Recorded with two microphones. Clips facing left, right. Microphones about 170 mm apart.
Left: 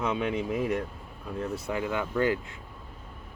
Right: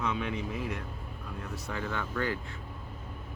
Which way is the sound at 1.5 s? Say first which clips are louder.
Left 4 dB; 15° left (ahead or behind).